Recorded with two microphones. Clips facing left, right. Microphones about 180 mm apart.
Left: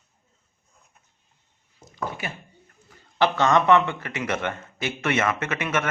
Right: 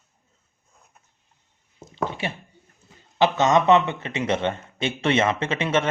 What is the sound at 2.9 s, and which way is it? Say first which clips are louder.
Speech: right 2 dB; 20° right (ahead or behind).